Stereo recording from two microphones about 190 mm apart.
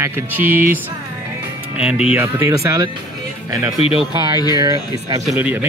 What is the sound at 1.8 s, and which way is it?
Speech, 5° right (ahead or behind).